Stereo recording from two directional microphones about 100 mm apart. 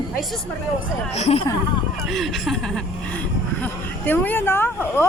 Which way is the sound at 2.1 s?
Centre (ahead or behind).